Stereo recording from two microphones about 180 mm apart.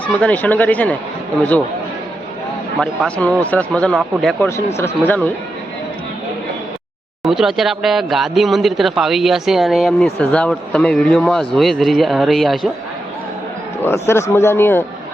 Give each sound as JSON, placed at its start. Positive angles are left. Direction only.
{"t": 0.2, "sound": "speech", "side_deg": 10}
{"t": 2.8, "sound": "speech", "side_deg": 5}
{"t": 4.4, "sound": "speech", "side_deg": 15}
{"t": 7.3, "sound": "speech", "side_deg": 0}
{"t": 13.8, "sound": "speech", "side_deg": 15}